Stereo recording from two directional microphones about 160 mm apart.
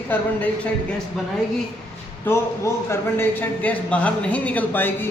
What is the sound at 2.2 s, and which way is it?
A man's voice, 15° left (ahead or behind).